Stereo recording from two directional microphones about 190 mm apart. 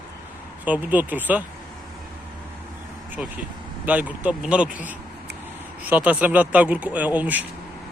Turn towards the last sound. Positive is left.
turn(degrees=-10)  # may be behind; listen again after turning